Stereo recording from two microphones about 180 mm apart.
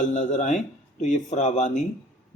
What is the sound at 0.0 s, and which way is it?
A man's voice, 40° left (ahead or behind).